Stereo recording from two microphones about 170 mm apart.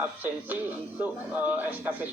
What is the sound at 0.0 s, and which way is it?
Speech, 10° right (ahead or behind).